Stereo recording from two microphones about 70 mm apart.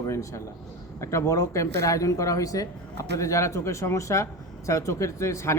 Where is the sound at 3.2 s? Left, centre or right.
Left.